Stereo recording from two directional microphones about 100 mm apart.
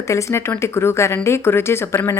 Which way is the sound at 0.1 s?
30° left (ahead or behind).